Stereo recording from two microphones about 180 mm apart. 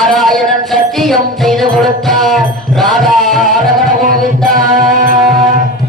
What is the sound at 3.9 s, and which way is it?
Music, 50° right (ahead or behind).